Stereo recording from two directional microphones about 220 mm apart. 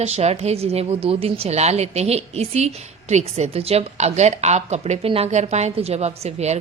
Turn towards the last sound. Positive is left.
turn(degrees=-30)  # may be behind; listen again after turning